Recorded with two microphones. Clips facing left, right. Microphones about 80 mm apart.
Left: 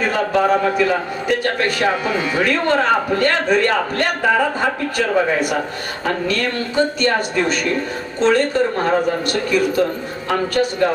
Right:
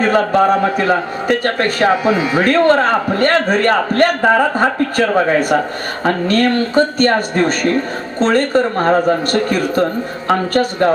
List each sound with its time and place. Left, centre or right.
0.0 s a man's voice: right
2.0 s speech: centre
2.4 s a man's voice: right